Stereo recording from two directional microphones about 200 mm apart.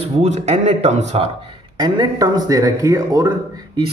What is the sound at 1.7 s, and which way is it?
A man's voice, 20° right (ahead or behind).